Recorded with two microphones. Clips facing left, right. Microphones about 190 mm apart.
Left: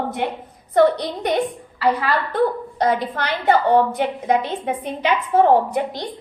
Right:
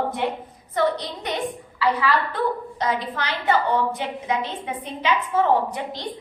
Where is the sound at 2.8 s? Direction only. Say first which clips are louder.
Left 6 dB; 60° left (ahead or behind).